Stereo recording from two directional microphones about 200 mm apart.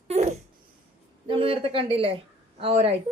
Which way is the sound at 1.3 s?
25° right (ahead or behind).